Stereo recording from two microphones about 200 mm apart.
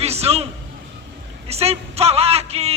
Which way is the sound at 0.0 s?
30° right (ahead or behind).